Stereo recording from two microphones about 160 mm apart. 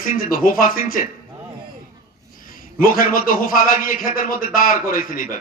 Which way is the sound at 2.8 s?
60° left (ahead or behind).